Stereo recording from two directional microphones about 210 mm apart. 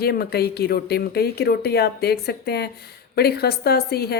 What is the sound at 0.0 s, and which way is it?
A woman's voice, 50° left (ahead or behind).